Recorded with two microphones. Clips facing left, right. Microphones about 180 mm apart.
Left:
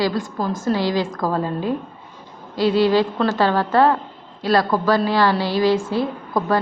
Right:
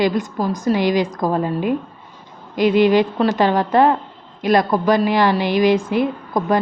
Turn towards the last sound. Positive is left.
turn(degrees=-20)  # may be behind; listen again after turning